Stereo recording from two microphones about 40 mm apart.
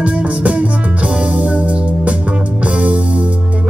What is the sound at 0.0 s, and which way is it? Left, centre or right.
Music, right.